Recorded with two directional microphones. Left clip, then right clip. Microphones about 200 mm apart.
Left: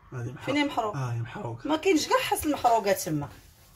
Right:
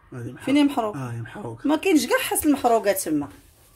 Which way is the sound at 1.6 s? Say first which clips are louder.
Right 4 dB; 50° right (ahead or behind).